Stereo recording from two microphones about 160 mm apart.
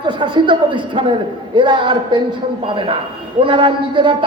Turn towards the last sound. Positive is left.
turn(degrees=-30)  # may be behind; listen again after turning